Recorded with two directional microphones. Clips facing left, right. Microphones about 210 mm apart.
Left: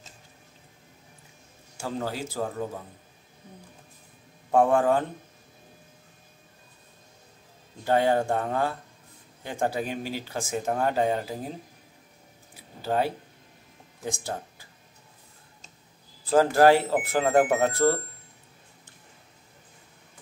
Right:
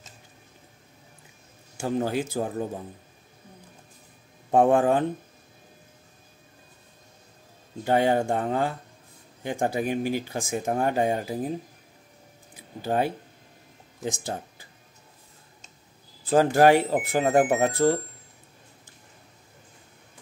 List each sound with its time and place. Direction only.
1.8 s speech: 20° right (ahead or behind)
4.5 s speech: 20° right (ahead or behind)
7.8 s speech: 15° right (ahead or behind)
12.8 s speech: 15° right (ahead or behind)
16.3 s speech: 20° right (ahead or behind)